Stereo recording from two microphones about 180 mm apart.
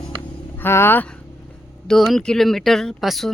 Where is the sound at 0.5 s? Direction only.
15° left (ahead or behind).